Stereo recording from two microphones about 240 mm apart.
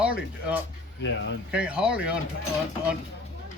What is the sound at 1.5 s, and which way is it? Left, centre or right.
Speech, centre.